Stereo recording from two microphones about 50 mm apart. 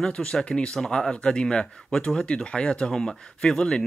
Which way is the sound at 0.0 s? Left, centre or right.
Centre.